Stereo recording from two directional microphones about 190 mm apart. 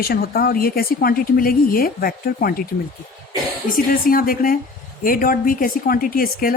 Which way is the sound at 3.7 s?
50° left (ahead or behind).